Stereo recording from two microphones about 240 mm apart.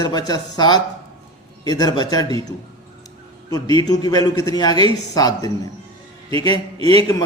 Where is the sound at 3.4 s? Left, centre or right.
Centre.